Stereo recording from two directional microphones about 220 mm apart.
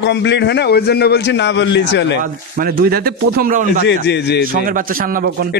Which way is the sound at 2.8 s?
45° right (ahead or behind).